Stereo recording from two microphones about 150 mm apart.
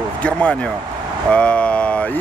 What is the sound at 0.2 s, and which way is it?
Speech, 10° left (ahead or behind).